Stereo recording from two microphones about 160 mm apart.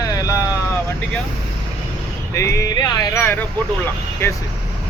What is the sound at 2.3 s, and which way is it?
Speech, 20° left (ahead or behind).